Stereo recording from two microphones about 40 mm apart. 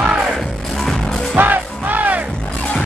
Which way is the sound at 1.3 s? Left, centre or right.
Right.